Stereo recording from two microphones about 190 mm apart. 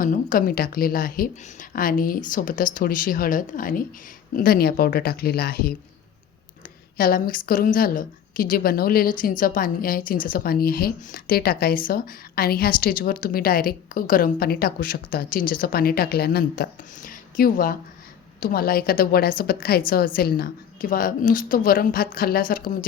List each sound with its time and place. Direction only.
0.0 s a woman's voice: 45° left (ahead or behind)
6.9 s a woman's voice: 50° left (ahead or behind)